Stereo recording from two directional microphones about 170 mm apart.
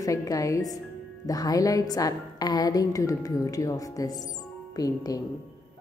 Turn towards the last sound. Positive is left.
turn(degrees=20)  # may be behind; listen again after turning